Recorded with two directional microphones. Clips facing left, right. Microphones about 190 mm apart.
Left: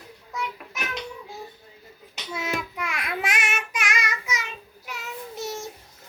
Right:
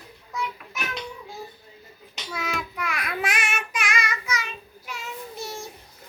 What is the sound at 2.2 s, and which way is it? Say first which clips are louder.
Child singing: left 1 dB; 25° left (ahead or behind).